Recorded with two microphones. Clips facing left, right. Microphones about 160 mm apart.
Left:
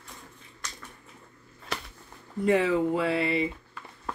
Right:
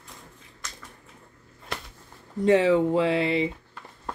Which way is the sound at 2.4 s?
25° right (ahead or behind).